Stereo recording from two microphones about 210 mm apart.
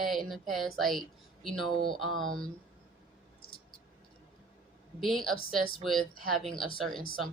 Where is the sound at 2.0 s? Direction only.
80° right.